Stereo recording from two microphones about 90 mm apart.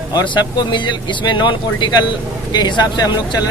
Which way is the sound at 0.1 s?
55° left (ahead or behind).